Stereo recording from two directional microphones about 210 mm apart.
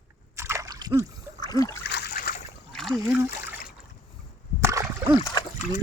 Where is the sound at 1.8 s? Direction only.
50° left (ahead or behind).